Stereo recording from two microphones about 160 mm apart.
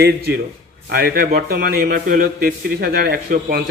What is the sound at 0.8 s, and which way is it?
A man's voice, 75° right (ahead or behind).